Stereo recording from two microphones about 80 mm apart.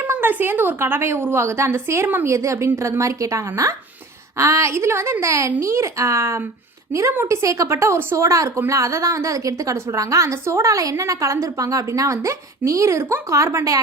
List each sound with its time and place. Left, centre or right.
0.0 s a woman's voice: right